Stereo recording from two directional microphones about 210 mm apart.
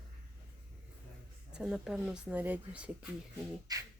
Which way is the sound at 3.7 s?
15° right (ahead or behind).